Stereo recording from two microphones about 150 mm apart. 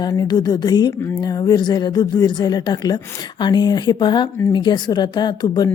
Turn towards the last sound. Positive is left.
turn(degrees=25)  # may be behind; listen again after turning